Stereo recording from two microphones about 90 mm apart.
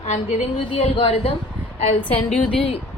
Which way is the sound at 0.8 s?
80° left.